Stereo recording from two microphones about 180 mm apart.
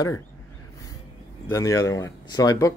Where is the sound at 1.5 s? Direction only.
20° left (ahead or behind).